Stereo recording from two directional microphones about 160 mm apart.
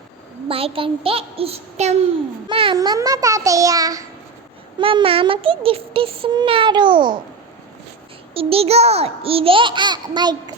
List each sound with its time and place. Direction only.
0.4 s speech: 35° right (ahead or behind)
2.5 s a child's voice: 30° right (ahead or behind)
4.8 s speech: 35° right (ahead or behind)
8.3 s speech: 35° right (ahead or behind)